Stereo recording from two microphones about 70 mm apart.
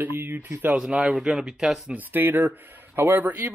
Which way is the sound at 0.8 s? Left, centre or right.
Centre.